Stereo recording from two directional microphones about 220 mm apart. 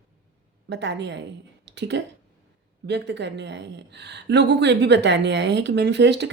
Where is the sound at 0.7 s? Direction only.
50° right (ahead or behind).